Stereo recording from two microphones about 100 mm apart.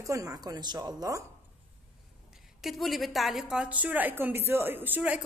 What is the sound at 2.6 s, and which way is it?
A woman's voice, centre (ahead or behind).